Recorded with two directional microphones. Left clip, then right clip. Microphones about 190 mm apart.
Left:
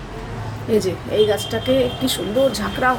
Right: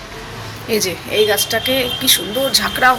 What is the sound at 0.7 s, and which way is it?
Speech, 15° left (ahead or behind).